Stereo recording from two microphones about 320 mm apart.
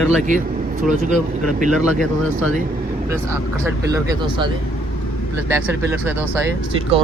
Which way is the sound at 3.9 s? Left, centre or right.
Centre.